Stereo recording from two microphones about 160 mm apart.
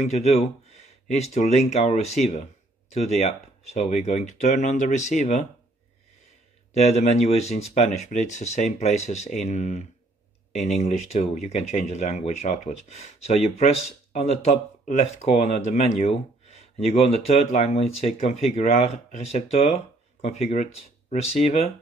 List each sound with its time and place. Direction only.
0.0 s speech: 45° left (ahead or behind)
6.7 s speech: 45° left (ahead or behind)